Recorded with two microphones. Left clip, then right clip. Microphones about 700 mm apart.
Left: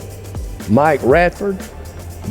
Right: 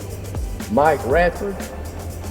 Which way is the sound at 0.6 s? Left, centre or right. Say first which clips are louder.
Left 9 dB; centre.